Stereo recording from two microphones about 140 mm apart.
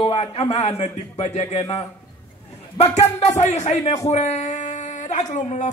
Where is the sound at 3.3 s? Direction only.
55° left (ahead or behind).